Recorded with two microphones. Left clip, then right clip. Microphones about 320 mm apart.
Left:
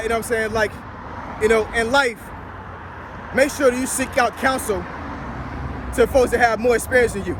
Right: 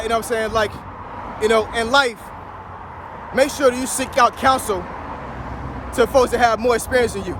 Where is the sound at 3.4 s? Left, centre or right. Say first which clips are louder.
Right 1 dB; centre.